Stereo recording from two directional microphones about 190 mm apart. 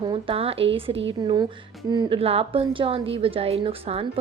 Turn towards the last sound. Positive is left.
turn(degrees=-30)  # may be behind; listen again after turning